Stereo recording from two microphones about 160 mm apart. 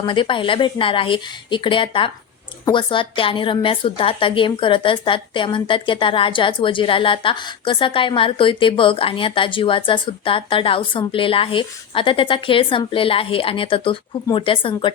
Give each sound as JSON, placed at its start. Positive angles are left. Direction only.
{"t": 0.0, "sound": "a woman's voice", "side_deg": 30}